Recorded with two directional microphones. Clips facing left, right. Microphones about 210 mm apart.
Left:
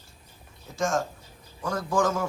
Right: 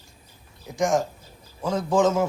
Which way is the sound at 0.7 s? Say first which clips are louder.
Right 4 dB; 15° right (ahead or behind).